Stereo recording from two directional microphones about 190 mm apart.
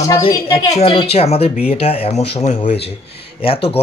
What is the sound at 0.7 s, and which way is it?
A woman's voice, 30° left (ahead or behind).